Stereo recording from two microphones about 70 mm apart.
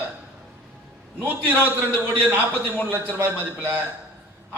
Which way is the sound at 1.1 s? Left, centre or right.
Right.